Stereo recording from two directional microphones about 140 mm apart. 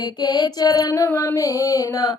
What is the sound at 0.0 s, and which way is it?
Child singing, 30° left (ahead or behind).